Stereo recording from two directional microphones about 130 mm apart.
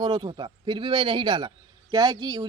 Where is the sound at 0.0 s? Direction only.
35° right (ahead or behind).